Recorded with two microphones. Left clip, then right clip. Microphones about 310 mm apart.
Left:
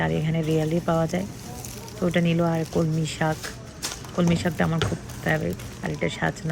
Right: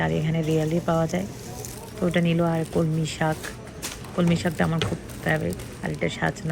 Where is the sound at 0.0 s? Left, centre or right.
Centre.